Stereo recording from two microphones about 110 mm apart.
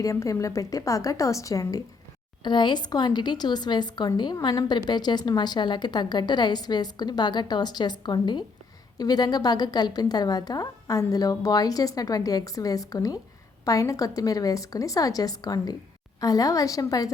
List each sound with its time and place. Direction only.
0.0 s a woman's voice: 30° left (ahead or behind)
2.4 s speech: 45° left (ahead or behind)